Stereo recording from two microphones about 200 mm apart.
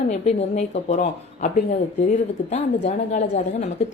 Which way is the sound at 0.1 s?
35° left (ahead or behind).